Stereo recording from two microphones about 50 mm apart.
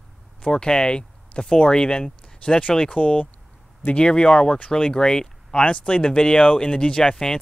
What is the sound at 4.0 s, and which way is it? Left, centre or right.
Speech, centre.